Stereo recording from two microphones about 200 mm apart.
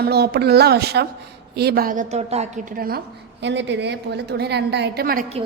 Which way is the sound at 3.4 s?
60° right (ahead or behind).